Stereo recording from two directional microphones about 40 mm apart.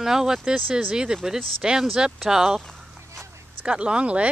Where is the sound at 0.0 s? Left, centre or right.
Centre.